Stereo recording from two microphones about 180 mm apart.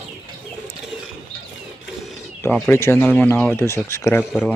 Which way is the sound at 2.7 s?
15° left (ahead or behind).